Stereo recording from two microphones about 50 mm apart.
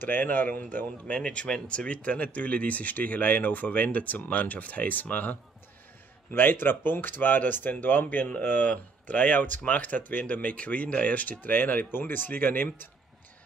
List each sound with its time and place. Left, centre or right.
0.0 s speech: left
1.0 s speech: left